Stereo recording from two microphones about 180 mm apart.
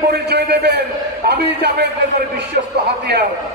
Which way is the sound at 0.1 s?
65° right (ahead or behind).